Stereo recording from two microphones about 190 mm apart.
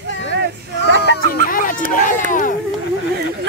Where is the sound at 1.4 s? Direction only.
45° left (ahead or behind).